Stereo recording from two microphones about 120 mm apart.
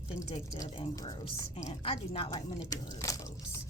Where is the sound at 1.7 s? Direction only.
50° left (ahead or behind).